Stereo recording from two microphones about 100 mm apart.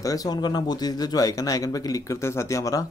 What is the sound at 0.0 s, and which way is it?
A man's voice, 35° left (ahead or behind).